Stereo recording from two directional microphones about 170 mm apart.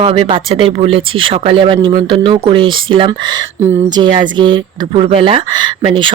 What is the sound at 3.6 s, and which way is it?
Speech, 15° right (ahead or behind).